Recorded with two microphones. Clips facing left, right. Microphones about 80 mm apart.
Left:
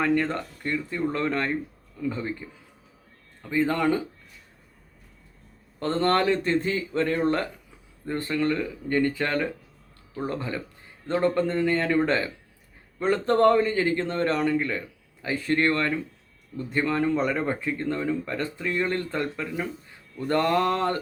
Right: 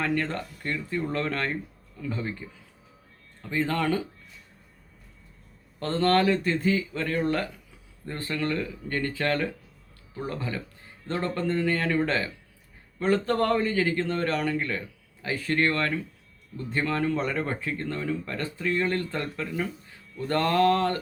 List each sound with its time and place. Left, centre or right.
0.0 s speech: centre
5.8 s speech: left
8.0 s speech: centre